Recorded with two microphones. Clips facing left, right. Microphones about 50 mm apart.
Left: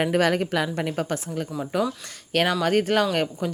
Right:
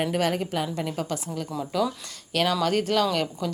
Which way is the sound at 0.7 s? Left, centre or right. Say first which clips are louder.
Left 3 dB; left.